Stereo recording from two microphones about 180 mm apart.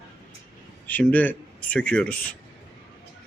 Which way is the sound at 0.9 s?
10° left (ahead or behind).